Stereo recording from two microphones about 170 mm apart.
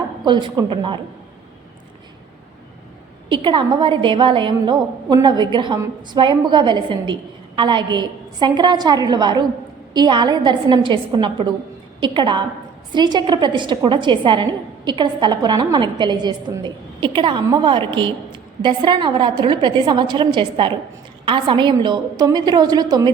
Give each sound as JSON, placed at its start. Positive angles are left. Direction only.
{"t": 0.3, "sound": "a woman's voice", "side_deg": -25}
{"t": 3.2, "sound": "a woman's voice", "side_deg": -30}